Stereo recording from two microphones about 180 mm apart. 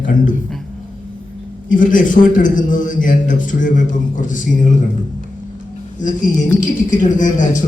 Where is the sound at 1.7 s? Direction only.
45° left (ahead or behind).